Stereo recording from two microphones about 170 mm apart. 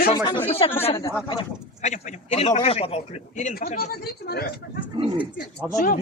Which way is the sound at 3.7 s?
65° left (ahead or behind).